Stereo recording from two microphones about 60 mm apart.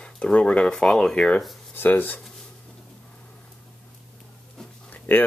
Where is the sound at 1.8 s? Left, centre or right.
Left.